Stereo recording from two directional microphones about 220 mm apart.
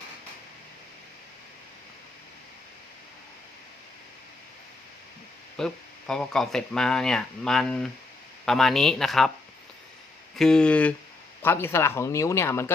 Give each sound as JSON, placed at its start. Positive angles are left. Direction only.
{"t": 5.5, "sound": "speech", "side_deg": 5}
{"t": 10.3, "sound": "speech", "side_deg": 0}